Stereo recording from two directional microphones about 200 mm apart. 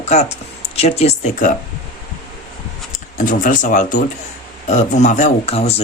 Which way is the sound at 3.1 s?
40° left (ahead or behind).